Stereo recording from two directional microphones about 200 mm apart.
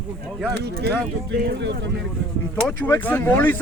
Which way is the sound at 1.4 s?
60° right (ahead or behind).